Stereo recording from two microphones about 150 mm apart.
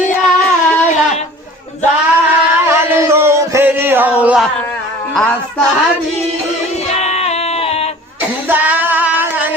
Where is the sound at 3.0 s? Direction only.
15° right (ahead or behind).